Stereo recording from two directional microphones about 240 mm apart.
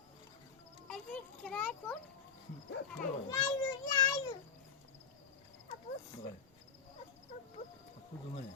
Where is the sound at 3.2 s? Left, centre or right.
Centre.